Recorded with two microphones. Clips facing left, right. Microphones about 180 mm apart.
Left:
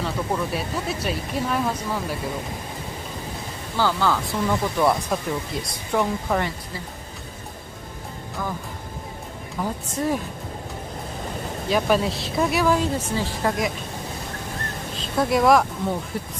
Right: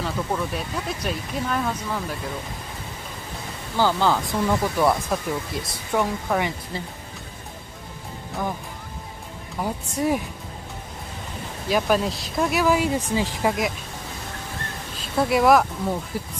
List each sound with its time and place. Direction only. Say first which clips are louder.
0.0 s speech: left 1 dB; 5° left (ahead or behind)
3.7 s speech: right 1 dB; 15° right (ahead or behind)
4.5 s speech: even; centre (ahead or behind)
8.4 s speech: right 2 dB; 20° right (ahead or behind)
9.6 s speech: right 1 dB; 15° right (ahead or behind)
11.7 s speech: even; centre (ahead or behind)
15.1 s speech: even; 5° right (ahead or behind)